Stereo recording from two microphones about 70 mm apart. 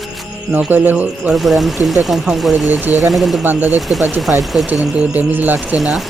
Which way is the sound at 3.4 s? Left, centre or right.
Right.